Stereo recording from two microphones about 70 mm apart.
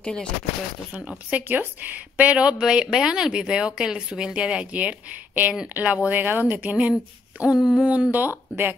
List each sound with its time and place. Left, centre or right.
0.0 s speech: centre
1.0 s speech: right
7.5 s a sound: centre
7.8 s speech: centre
8.1 s speech: right